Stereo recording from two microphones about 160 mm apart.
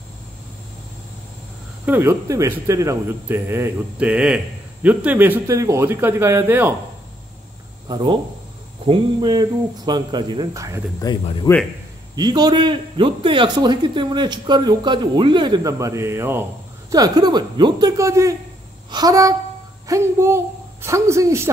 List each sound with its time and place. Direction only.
1.9 s speech: 15° right (ahead or behind)
7.9 s a man's voice: 30° right (ahead or behind)
11.0 s speech: 25° left (ahead or behind)
12.2 s a man's voice: 25° right (ahead or behind)
16.9 s a man's voice: 25° right (ahead or behind)